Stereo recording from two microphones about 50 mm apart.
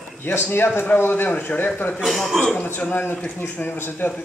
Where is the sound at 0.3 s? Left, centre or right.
Left.